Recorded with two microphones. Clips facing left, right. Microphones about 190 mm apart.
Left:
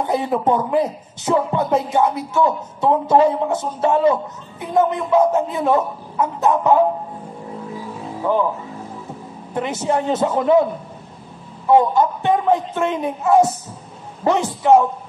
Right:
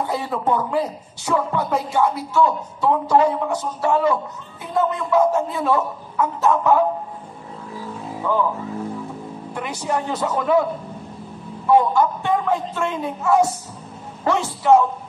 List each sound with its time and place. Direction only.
0.0 s speech: 20° left (ahead or behind)
8.2 s speech: 20° left (ahead or behind)
9.5 s speech: 25° left (ahead or behind)
11.7 s speech: 20° left (ahead or behind)